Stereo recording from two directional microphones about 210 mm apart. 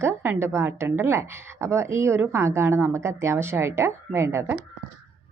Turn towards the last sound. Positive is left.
turn(degrees=-15)  # may be behind; listen again after turning